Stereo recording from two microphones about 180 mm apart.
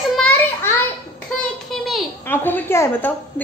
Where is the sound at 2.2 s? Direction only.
10° left (ahead or behind).